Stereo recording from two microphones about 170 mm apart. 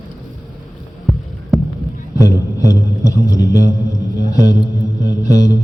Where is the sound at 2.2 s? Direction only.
20° left (ahead or behind).